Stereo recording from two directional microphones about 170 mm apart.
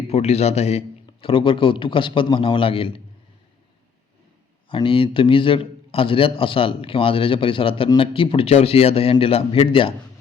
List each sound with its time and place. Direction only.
0.1 s a man's voice: 40° left (ahead or behind)
4.7 s a man's voice: 30° left (ahead or behind)